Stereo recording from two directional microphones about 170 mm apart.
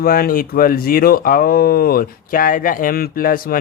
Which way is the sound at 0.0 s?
60° left (ahead or behind).